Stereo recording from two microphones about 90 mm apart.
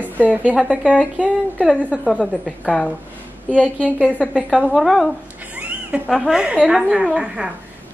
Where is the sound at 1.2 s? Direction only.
15° right (ahead or behind).